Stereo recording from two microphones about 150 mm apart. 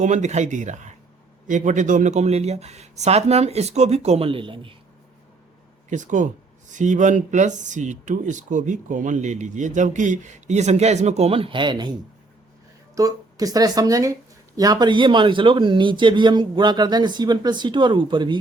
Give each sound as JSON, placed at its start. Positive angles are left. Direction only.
{"t": 0.0, "sound": "speech", "side_deg": -50}
{"t": 5.9, "sound": "speech", "side_deg": -55}
{"t": 13.0, "sound": "speech", "side_deg": -25}